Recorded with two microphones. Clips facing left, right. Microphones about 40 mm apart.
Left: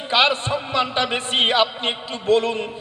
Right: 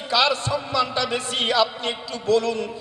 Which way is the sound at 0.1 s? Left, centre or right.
Left.